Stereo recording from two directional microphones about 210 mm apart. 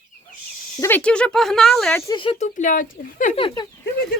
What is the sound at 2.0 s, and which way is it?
Speech, 25° left (ahead or behind).